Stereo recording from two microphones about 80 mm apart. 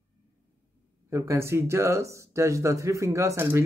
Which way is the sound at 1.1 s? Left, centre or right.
Right.